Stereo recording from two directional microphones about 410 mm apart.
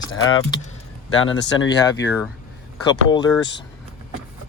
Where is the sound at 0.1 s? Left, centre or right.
Left.